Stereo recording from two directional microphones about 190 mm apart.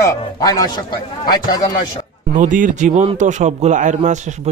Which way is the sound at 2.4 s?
45° right (ahead or behind).